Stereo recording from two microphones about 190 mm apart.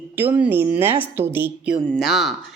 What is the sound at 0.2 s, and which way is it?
Speech, 10° right (ahead or behind).